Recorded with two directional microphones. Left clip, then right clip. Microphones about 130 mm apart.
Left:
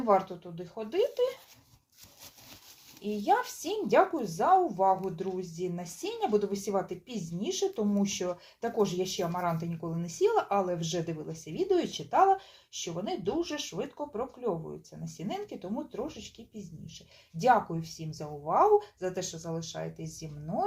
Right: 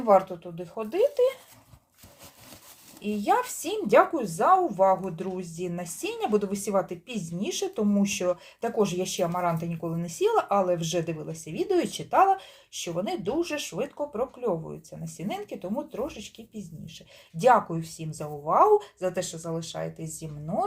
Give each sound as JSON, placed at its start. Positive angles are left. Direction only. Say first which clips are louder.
{"t": 0.0, "sound": "speech", "louder": "right 5 dB", "side_deg": -25}
{"t": 3.0, "sound": "speech", "louder": "right 3 dB", "side_deg": -20}
{"t": 17.3, "sound": "speech", "louder": "right 4 dB", "side_deg": -20}